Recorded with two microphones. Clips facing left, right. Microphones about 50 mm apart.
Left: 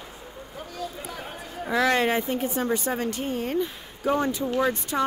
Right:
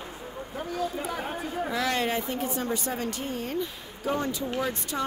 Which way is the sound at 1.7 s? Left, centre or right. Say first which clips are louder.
Left 7 dB; left.